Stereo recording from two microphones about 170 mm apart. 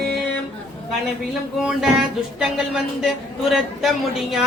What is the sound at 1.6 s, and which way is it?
Speech, 5° right (ahead or behind).